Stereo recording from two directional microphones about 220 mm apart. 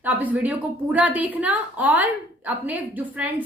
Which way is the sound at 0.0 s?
5° right (ahead or behind).